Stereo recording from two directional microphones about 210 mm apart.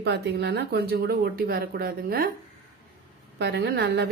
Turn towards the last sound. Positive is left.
turn(degrees=-55)  # may be behind; listen again after turning